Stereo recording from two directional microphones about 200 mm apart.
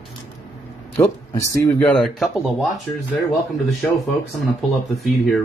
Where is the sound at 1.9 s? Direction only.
Centre (ahead or behind).